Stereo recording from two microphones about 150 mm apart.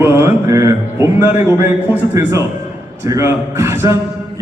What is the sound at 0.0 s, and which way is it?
Music, 15° right (ahead or behind).